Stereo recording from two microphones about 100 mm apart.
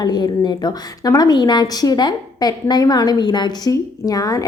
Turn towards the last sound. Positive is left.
turn(degrees=35)  # may be behind; listen again after turning